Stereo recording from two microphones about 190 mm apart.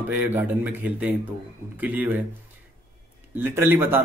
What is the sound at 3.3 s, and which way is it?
Speech, 10° right (ahead or behind).